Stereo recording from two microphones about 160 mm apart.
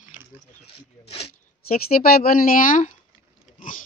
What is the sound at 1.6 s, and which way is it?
A woman's voice, 70° left (ahead or behind).